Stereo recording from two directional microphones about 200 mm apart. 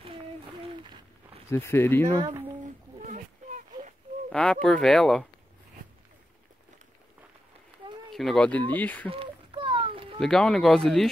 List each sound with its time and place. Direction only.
1.5 s speech: 10° left (ahead or behind)
3.1 s a sound: 40° right (ahead or behind)
4.3 s speech: 5° left (ahead or behind)
8.1 s speech: centre (ahead or behind)
9.1 s a sound: 25° right (ahead or behind)
10.2 s speech: 5° left (ahead or behind)